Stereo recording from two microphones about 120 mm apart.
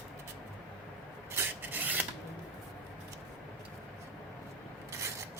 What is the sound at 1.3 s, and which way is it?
Rub, 15° right (ahead or behind).